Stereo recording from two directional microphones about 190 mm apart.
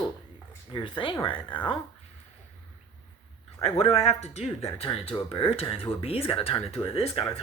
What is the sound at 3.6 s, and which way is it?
Speech, 30° left (ahead or behind).